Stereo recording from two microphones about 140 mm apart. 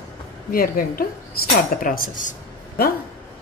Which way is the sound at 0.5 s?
90° left.